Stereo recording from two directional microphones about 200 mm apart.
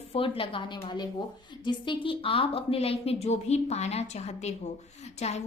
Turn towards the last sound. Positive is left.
turn(degrees=35)  # may be behind; listen again after turning